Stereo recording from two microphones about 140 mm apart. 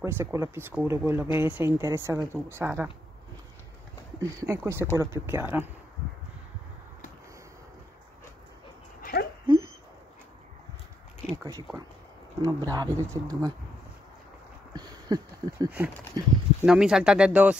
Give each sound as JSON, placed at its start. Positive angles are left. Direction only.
{"t": 0.0, "sound": "speech", "side_deg": -20}
{"t": 4.2, "sound": "speech", "side_deg": -20}
{"t": 9.0, "sound": "a sound", "side_deg": 90}
{"t": 11.3, "sound": "speech", "side_deg": -25}
{"t": 14.7, "sound": "a sound", "side_deg": -30}
{"t": 16.6, "sound": "speech", "side_deg": -5}